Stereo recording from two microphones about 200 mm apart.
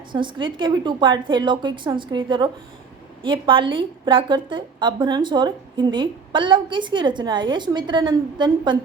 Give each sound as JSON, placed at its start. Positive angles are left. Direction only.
{"t": 0.1, "sound": "a woman's voice", "side_deg": -25}